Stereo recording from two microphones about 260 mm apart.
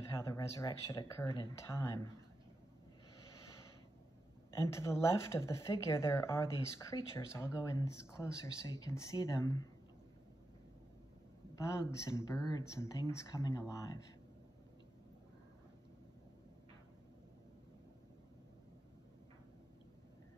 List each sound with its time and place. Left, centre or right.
0.0 s speech: centre
4.5 s speech: centre
11.5 s speech: centre